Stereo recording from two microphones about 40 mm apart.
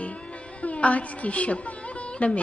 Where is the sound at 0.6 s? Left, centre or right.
Left.